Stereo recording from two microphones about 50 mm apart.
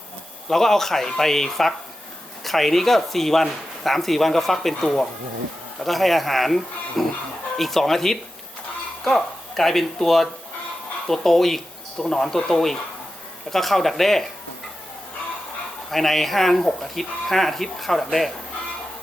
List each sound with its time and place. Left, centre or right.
0.4 s speech: centre
15.9 s speech: centre